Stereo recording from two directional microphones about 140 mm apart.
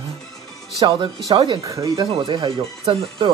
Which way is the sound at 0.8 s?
25° right (ahead or behind).